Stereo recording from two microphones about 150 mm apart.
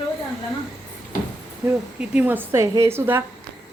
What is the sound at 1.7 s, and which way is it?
A woman's voice, 10° right (ahead or behind).